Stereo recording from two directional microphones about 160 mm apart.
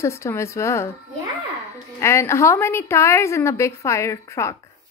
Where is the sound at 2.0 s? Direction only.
15° left (ahead or behind).